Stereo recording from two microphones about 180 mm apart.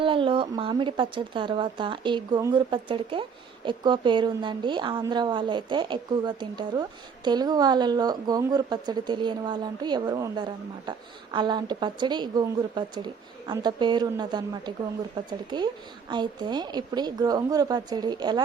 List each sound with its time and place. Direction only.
0.0 s speech: 30° right (ahead or behind)